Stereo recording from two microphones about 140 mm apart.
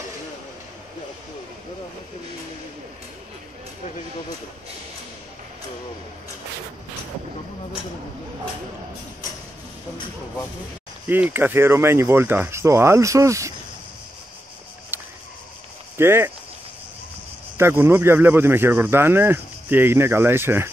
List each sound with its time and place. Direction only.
11.1 s speech: 15° right (ahead or behind)
14.9 s a sound: 15° right (ahead or behind)
16.0 s speech: 15° right (ahead or behind)
17.6 s speech: 15° right (ahead or behind)